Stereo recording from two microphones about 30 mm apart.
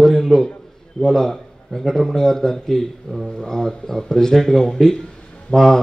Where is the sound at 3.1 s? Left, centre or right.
Left.